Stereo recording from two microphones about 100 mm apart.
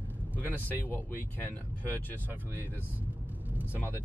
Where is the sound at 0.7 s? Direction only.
20° left (ahead or behind).